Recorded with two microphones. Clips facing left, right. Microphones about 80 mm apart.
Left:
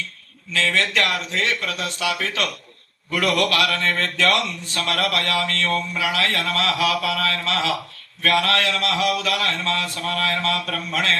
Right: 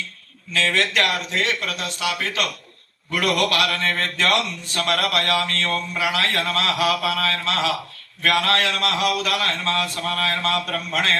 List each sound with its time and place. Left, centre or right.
0.6 s a man's voice: right